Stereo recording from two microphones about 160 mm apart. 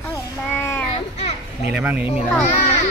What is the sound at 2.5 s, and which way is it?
Children playing, 45° left (ahead or behind).